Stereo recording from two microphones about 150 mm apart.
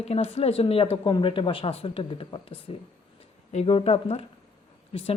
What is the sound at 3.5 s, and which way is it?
Speech, 45° left (ahead or behind).